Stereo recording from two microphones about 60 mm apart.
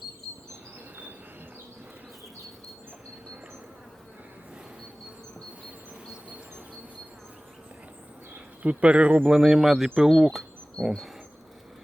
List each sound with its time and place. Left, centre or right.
8.6 s speech: right
9.4 s speech: centre